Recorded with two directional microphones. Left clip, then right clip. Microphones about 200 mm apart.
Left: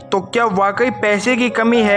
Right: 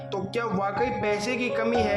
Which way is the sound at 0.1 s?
45° left (ahead or behind).